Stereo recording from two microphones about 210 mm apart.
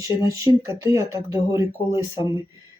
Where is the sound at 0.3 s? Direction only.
15° right (ahead or behind).